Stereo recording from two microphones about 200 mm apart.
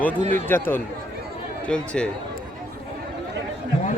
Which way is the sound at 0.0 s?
10° left (ahead or behind).